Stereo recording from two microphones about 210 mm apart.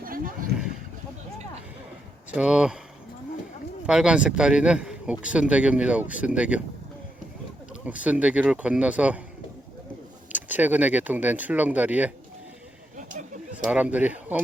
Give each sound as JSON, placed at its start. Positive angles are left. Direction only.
{"t": 2.3, "sound": "speech", "side_deg": -5}
{"t": 3.8, "sound": "speech", "side_deg": -5}
{"t": 7.9, "sound": "speech", "side_deg": -5}
{"t": 10.3, "sound": "speech", "side_deg": -10}
{"t": 13.0, "sound": "a sound", "side_deg": -35}
{"t": 13.6, "sound": "speech", "side_deg": -5}